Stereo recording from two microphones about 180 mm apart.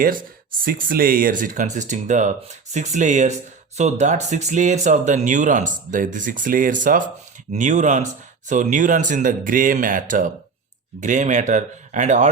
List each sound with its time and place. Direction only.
0.6 s speech: 55° right (ahead or behind)